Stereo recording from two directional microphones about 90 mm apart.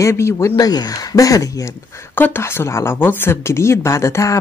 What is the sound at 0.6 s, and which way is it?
Speech, 45° left (ahead or behind).